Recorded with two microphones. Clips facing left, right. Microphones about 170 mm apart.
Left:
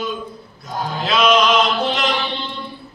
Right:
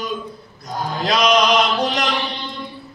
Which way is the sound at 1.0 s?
40° right (ahead or behind).